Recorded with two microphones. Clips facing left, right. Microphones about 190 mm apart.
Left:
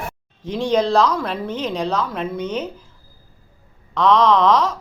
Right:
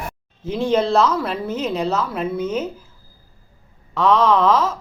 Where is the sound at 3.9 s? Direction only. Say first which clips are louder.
Left 1 dB; 5° right (ahead or behind).